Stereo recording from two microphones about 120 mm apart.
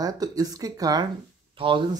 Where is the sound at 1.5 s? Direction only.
45° right (ahead or behind).